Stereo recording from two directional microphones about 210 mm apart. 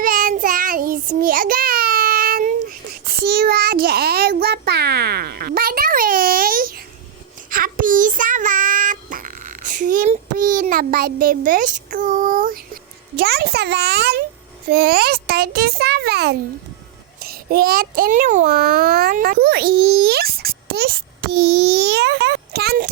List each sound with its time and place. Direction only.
0.0 s child singing: 40° right (ahead or behind)
13.1 s a child's voice: 50° right (ahead or behind)